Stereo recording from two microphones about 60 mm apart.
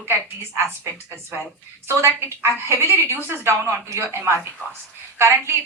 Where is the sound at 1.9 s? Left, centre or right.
Right.